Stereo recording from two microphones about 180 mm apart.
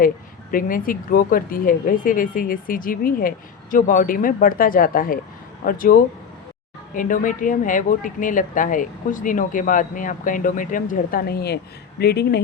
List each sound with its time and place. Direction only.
0.5 s speech: 50° left (ahead or behind)